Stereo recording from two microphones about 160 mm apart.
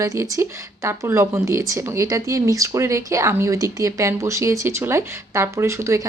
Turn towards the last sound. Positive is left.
turn(degrees=-20)  # may be behind; listen again after turning